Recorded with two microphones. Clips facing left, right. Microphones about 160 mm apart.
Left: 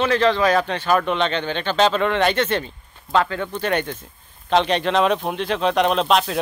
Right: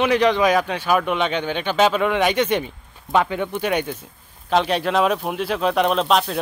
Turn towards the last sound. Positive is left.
turn(degrees=0)  # may be behind; listen again after turning